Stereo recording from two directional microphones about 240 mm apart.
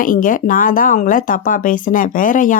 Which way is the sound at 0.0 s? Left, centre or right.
Left.